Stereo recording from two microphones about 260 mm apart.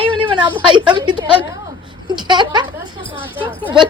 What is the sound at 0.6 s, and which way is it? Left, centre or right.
A woman's voice, centre.